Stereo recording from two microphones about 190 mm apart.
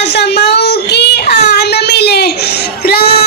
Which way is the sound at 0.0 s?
65° left (ahead or behind).